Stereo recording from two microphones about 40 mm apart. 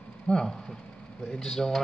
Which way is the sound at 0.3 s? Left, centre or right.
Centre.